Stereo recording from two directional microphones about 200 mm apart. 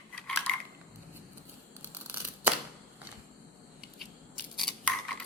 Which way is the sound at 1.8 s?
10° right (ahead or behind).